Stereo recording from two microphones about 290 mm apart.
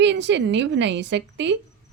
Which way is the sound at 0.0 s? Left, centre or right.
Right.